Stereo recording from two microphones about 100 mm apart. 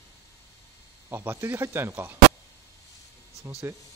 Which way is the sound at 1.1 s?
20° right (ahead or behind).